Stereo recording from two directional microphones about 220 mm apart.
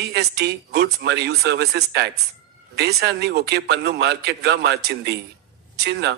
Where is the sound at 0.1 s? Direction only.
50° right (ahead or behind).